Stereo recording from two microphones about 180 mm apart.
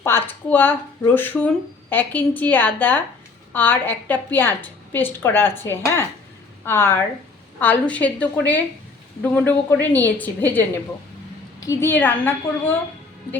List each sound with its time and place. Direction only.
0.0 s a woman's voice: 10° left (ahead or behind)
11.6 s a woman's voice: 15° left (ahead or behind)